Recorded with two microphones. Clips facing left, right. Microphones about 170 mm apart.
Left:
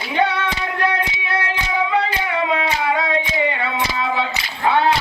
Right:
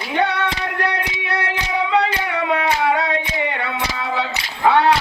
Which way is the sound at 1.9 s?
65° right (ahead or behind).